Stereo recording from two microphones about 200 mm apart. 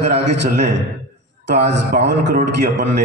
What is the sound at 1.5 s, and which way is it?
A man's voice, 55° right (ahead or behind).